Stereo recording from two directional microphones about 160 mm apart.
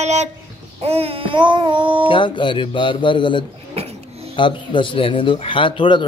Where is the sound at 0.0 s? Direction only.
45° right (ahead or behind).